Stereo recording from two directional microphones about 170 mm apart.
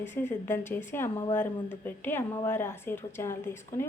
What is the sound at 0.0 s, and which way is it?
A woman's voice, 15° left (ahead or behind).